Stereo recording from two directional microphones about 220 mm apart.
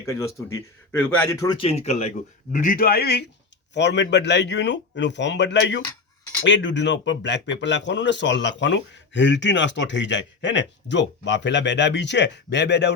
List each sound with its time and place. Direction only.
0.0 s speech: 15° left (ahead or behind); by 12.9 s 50° left (ahead or behind)